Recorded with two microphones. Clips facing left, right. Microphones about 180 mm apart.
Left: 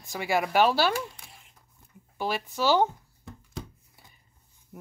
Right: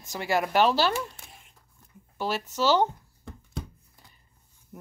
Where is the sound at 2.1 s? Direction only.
10° left (ahead or behind).